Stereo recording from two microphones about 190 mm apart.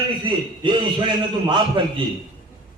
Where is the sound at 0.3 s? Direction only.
25° right (ahead or behind).